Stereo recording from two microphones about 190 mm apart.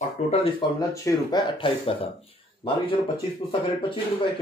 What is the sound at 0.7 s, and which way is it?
Speech, 20° left (ahead or behind).